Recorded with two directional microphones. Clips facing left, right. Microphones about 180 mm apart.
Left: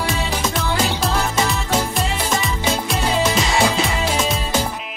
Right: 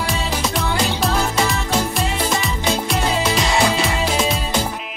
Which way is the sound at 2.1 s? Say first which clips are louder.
Right 1 dB; 10° right (ahead or behind).